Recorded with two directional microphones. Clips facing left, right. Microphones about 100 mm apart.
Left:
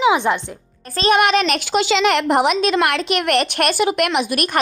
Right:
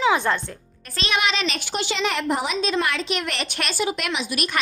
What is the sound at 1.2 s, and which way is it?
Speech, 55° left (ahead or behind).